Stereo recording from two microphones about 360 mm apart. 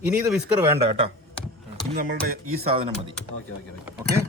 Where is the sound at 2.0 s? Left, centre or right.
Right.